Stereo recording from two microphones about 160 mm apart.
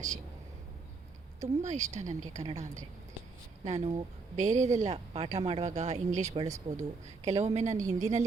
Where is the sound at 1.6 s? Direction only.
45° right (ahead or behind).